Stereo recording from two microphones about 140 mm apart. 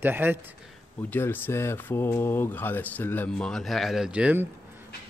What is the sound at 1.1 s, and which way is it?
Speech, 15° left (ahead or behind).